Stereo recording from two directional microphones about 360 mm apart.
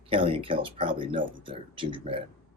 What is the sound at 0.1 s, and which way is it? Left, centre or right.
Speech, centre.